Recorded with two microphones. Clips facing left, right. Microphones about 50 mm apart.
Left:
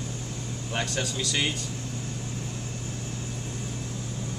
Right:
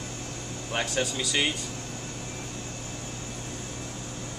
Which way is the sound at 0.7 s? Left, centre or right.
Centre.